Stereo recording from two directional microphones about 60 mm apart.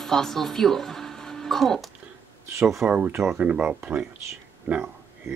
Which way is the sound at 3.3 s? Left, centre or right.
Right.